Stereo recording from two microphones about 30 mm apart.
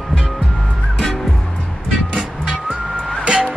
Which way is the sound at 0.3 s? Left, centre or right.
Centre.